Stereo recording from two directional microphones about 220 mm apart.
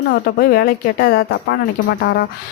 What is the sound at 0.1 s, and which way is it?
Speech, 45° left (ahead or behind).